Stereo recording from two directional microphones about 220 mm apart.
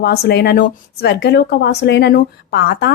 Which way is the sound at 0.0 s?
45° left (ahead or behind).